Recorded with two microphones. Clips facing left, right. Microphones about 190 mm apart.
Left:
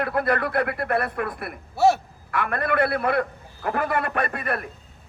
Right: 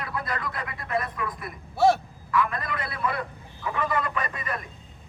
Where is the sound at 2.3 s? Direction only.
65° left (ahead or behind).